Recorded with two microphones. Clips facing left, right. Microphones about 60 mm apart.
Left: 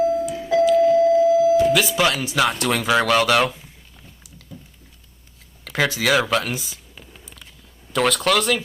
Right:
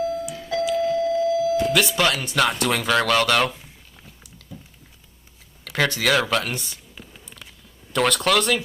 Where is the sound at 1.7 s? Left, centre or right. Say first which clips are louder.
Left 1 dB; centre.